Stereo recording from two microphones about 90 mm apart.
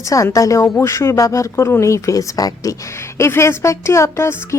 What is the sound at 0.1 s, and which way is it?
Speech, 40° left (ahead or behind).